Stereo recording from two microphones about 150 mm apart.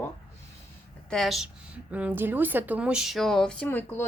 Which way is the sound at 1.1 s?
Centre (ahead or behind).